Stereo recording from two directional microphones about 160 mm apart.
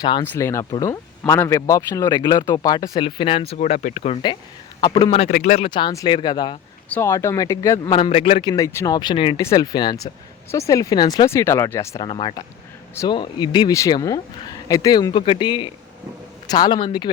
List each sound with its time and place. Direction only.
0.0 s speech: 20° left (ahead or behind)
3.6 s speech: 50° left (ahead or behind)
5.5 s speech: 30° left (ahead or behind)
6.9 s speech: 15° left (ahead or behind)
7.9 s speech: 35° left (ahead or behind)
9.4 s speech: 20° left (ahead or behind)
12.0 s speech: 30° left (ahead or behind)